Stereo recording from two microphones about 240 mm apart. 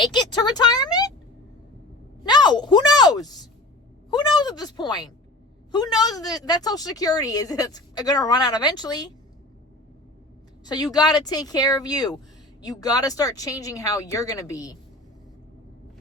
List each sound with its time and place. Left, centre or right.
0.1 s speech: centre
2.2 s a woman's voice: centre
4.1 s a sound: centre
5.7 s speech: centre
10.7 s speech: centre